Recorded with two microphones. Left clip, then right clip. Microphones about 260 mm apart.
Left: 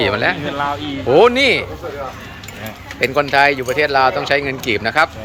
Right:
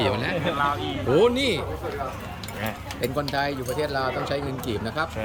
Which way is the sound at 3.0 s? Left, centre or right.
Centre.